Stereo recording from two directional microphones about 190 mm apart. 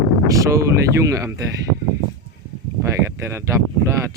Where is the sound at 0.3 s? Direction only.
15° right (ahead or behind).